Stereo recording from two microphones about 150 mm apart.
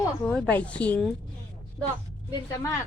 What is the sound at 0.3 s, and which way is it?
Music, 5° left (ahead or behind).